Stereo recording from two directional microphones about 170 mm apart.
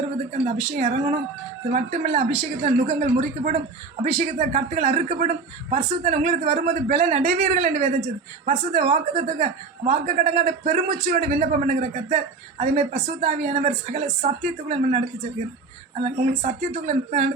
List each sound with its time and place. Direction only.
0.8 s speech: 40° right (ahead or behind)